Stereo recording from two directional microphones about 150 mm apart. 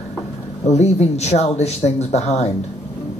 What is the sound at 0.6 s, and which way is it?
Speech, 45° left (ahead or behind).